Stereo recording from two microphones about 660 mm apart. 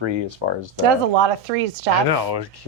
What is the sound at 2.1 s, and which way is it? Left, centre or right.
Speech, right.